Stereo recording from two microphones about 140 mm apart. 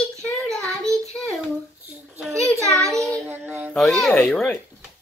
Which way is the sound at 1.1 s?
5° left (ahead or behind).